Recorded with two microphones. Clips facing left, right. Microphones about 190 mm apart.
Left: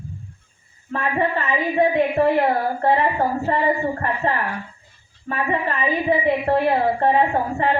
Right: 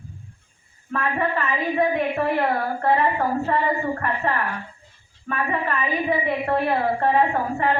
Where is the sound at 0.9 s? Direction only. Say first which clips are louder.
Left 2 dB; 30° left (ahead or behind).